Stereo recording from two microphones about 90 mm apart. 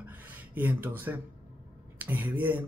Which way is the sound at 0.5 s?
20° right (ahead or behind).